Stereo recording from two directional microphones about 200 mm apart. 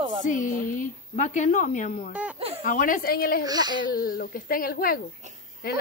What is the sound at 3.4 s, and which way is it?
Speech, 20° right (ahead or behind).